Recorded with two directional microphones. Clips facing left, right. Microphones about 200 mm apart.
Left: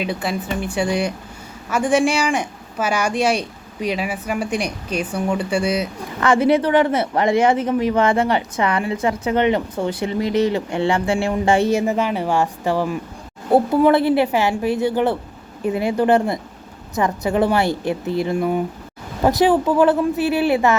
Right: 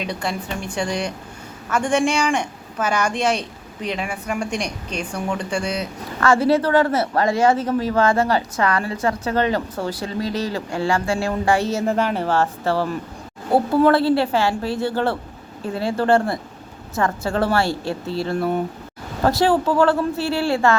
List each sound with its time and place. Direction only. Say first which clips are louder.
0.0 s a woman's voice: left 3 dB; 5° left (ahead or behind); by 11.6 s 25° left (ahead or behind)
11.7 s speech: left 2 dB; 10° left (ahead or behind)